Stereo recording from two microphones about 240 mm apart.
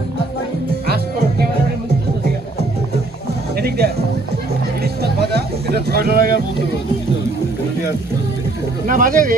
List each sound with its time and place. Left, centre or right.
3.6 s music: right
8.9 s speech: right